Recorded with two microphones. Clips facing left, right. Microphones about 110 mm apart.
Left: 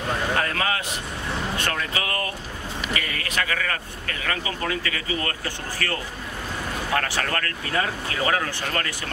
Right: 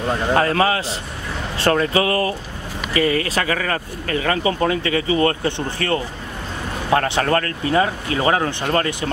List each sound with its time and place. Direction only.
0.3 s speech: 35° right (ahead or behind)